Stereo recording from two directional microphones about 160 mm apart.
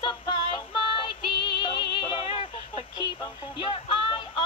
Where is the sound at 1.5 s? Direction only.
30° left (ahead or behind).